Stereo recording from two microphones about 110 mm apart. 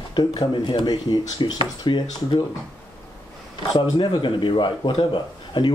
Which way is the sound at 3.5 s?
45° left (ahead or behind).